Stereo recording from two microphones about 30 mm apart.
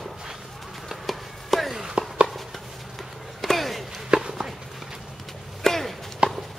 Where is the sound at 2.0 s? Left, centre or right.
Right.